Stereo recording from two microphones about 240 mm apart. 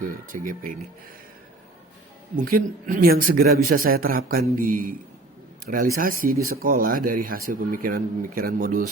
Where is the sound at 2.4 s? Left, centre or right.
Right.